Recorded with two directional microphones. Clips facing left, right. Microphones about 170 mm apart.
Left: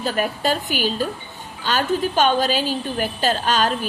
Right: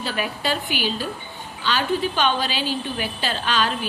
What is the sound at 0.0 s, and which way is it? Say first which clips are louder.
A woman's voice: left 4 dB; 45° left (ahead or behind).